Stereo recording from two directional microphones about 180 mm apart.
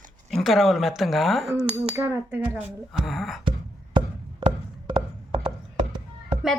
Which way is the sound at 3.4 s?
25° right (ahead or behind).